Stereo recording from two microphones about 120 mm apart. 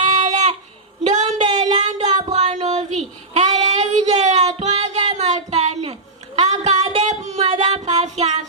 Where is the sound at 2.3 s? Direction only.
70° right (ahead or behind).